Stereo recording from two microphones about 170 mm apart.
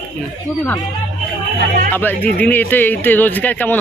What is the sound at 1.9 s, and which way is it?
Speech, 10° left (ahead or behind).